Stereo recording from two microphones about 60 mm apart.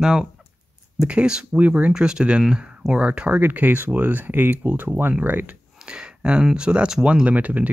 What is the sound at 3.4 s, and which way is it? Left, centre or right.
Speech, right.